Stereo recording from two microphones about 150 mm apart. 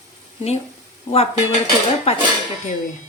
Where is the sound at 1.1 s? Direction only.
40° left (ahead or behind).